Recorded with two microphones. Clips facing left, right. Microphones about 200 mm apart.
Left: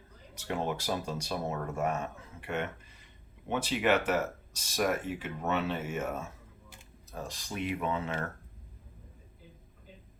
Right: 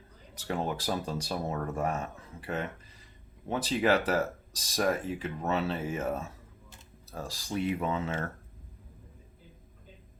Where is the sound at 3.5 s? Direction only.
35° right (ahead or behind).